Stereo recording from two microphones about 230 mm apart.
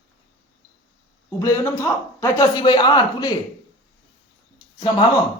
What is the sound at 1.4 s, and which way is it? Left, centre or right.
Speech, centre.